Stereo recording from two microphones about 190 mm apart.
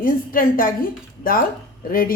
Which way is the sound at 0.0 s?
45° left (ahead or behind).